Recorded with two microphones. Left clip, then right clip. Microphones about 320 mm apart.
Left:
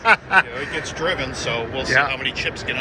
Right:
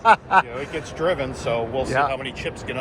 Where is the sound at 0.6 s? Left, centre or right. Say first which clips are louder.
Left 1 dB; right.